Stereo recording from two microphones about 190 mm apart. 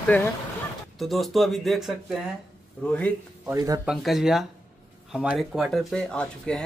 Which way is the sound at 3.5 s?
20° right (ahead or behind).